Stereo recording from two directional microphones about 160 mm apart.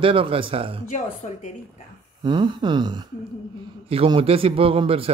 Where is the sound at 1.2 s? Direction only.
40° left (ahead or behind).